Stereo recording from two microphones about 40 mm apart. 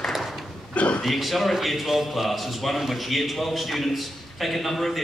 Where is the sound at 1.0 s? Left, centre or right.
Centre.